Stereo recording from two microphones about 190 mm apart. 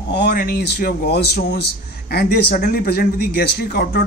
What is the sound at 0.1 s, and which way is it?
A man's voice, 60° left (ahead or behind).